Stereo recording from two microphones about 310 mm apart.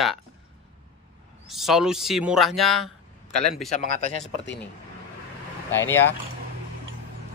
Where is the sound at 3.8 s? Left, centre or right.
Left.